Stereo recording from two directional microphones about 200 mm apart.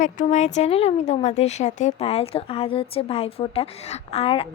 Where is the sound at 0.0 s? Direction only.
40° left (ahead or behind).